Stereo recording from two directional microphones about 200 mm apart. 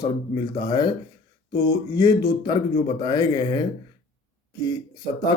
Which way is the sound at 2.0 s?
20° left (ahead or behind).